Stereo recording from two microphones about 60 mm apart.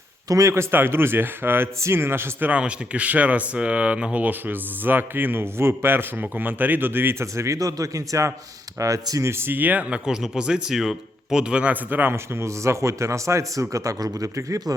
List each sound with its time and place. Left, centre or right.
0.3 s speech: right
0.5 s a man's voice: right
2.5 s a man's voice: centre; by 9.3 s right
9.3 s a man's voice: right
9.9 s speech: centre
11.7 s a man's voice: right
12.1 s a man's voice: right